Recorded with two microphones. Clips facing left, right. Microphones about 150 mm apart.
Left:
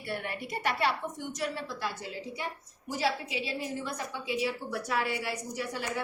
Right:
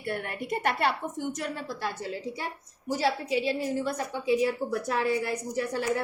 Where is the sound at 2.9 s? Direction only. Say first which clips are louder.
Right 5 dB; 40° right (ahead or behind).